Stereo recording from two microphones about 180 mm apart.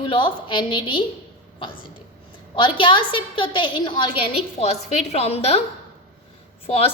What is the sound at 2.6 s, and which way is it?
A woman's voice, 30° left (ahead or behind).